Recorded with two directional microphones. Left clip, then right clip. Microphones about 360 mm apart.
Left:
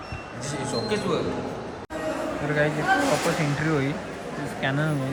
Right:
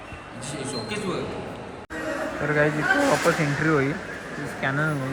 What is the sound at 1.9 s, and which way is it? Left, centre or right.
Speech, centre.